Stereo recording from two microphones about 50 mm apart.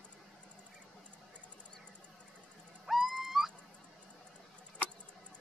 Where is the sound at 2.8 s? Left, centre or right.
Centre.